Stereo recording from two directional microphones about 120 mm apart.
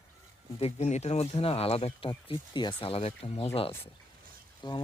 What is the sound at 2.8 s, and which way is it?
Speech, 55° left (ahead or behind).